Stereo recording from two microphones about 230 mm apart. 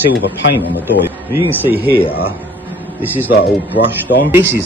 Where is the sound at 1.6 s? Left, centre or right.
Centre.